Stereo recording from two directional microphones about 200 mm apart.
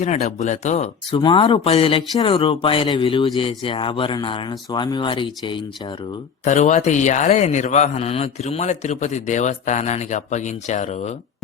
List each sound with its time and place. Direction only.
0.0 s a man's voice: 35° left (ahead or behind)
6.4 s a man's voice: 35° left (ahead or behind)